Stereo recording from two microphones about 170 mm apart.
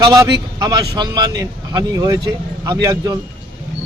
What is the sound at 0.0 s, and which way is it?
Speech, 20° right (ahead or behind).